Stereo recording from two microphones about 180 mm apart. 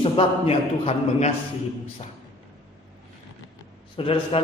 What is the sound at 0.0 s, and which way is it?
A man's voice, 30° left (ahead or behind).